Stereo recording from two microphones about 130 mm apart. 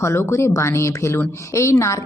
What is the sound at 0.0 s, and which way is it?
Speech, 20° left (ahead or behind).